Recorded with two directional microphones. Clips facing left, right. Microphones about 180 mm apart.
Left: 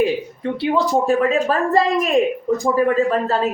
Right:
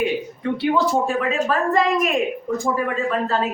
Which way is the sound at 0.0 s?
30° left (ahead or behind).